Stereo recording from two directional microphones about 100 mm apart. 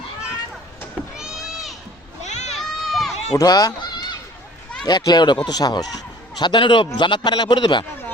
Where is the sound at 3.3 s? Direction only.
40° left (ahead or behind).